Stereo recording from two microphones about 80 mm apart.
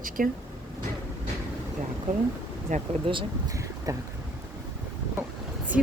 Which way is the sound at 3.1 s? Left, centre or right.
Right.